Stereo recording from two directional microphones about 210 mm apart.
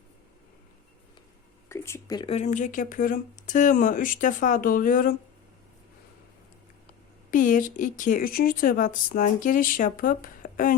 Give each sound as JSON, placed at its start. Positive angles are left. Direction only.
{"t": 1.7, "sound": "speech", "side_deg": 10}
{"t": 7.3, "sound": "speech", "side_deg": 40}